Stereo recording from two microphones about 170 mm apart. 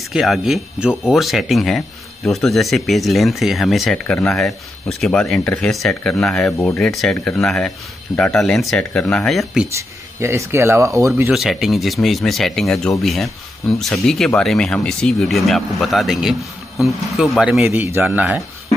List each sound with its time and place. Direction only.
0.1 s speech: centre (ahead or behind)
9.8 s speech: 15° right (ahead or behind)
11.3 s speech: centre (ahead or behind)